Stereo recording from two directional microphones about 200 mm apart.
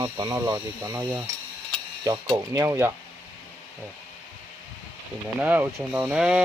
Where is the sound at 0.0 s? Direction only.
15° right (ahead or behind).